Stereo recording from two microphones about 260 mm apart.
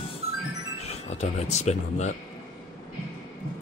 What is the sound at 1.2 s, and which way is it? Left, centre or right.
Speech, left.